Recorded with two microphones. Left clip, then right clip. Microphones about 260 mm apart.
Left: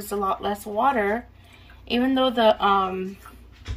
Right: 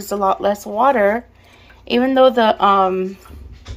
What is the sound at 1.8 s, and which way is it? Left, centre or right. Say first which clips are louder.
Speech: right 9 dB; centre.